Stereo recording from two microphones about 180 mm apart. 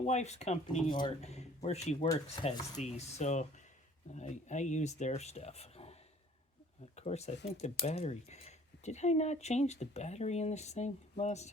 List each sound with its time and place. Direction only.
0.0 s speech: 40° left (ahead or behind)
0.9 s speech: 25° left (ahead or behind)
1.2 s speech: 35° left (ahead or behind)